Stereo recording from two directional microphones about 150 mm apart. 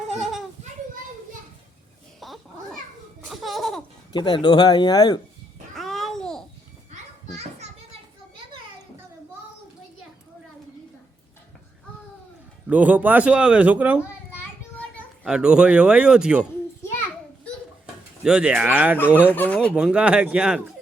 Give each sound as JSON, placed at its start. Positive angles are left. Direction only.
{"t": 0.1, "sound": "children playing", "side_deg": 0}
{"t": 2.2, "sound": "children playing", "side_deg": 0}
{"t": 3.2, "sound": "laughter", "side_deg": 0}
{"t": 4.1, "sound": "speech", "side_deg": 30}
{"t": 5.7, "sound": "babbling", "side_deg": 0}
{"t": 12.6, "sound": "speech", "side_deg": -10}
{"t": 15.2, "sound": "speech", "side_deg": -5}
{"t": 18.2, "sound": "speech", "side_deg": -5}
{"t": 19.3, "sound": "speech", "side_deg": 10}
{"t": 19.7, "sound": "speech", "side_deg": -5}